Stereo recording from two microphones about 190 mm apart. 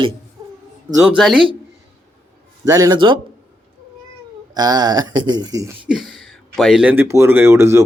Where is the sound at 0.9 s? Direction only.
15° right (ahead or behind).